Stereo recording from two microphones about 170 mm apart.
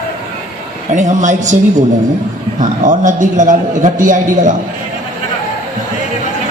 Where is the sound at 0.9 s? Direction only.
45° right (ahead or behind).